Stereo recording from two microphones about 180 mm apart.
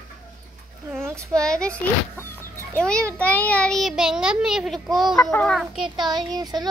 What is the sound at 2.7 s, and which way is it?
A child's voice, 5° left (ahead or behind).